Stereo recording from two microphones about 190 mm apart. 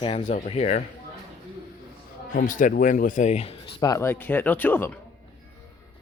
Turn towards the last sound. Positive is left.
turn(degrees=10)  # may be behind; listen again after turning